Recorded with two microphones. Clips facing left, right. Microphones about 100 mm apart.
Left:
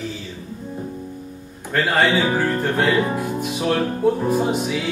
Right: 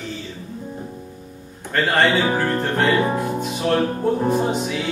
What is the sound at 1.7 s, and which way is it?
Music, 5° left (ahead or behind).